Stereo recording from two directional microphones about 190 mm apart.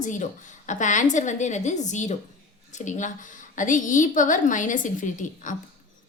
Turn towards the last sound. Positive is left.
turn(degrees=40)  # may be behind; listen again after turning